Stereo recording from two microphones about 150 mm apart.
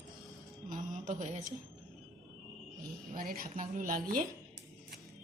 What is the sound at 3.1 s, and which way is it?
Speech, 75° right (ahead or behind).